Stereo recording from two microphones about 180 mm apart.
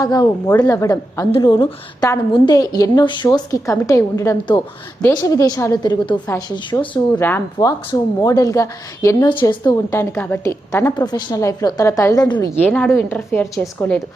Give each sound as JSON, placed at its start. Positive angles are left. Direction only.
{"t": 0.0, "sound": "a woman's voice", "side_deg": 25}
{"t": 7.2, "sound": "a woman's voice", "side_deg": 10}
{"t": 12.6, "sound": "a woman's voice", "side_deg": 10}